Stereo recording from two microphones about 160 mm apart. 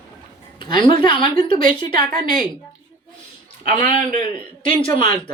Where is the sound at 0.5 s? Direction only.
30° left (ahead or behind).